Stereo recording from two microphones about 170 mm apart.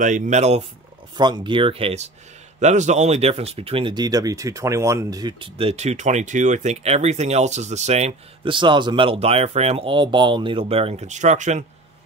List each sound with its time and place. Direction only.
0.0 s speech: 45° right (ahead or behind)
1.1 s speech: 25° right (ahead or behind); by 11.6 s 45° right (ahead or behind)